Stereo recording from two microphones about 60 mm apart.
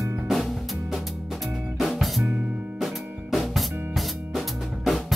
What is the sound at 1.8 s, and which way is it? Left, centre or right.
Music, centre.